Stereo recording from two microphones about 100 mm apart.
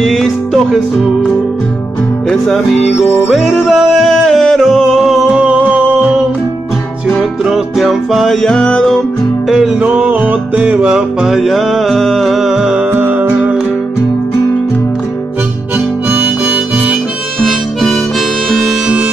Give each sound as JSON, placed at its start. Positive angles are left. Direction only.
{"t": 0.0, "sound": "music", "side_deg": 0}
{"t": 2.2, "sound": "music", "side_deg": 5}
{"t": 7.2, "sound": "music", "side_deg": 0}
{"t": 9.5, "sound": "music", "side_deg": -10}
{"t": 12.9, "sound": "music", "side_deg": -15}
{"t": 16.1, "sound": "harmonica", "side_deg": -20}
{"t": 17.4, "sound": "harmonica", "side_deg": 5}